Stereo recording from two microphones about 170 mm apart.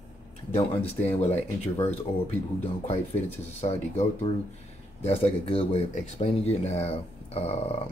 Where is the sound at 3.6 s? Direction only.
40° left (ahead or behind).